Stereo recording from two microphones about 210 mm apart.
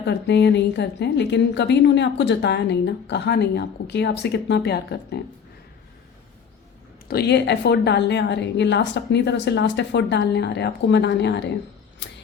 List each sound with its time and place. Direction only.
0.0 s a woman's voice: 55° left (ahead or behind)
7.1 s a woman's voice: 50° left (ahead or behind)
12.0 s a sound: 55° left (ahead or behind)